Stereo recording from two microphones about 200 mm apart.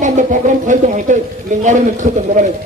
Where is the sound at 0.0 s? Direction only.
40° right (ahead or behind).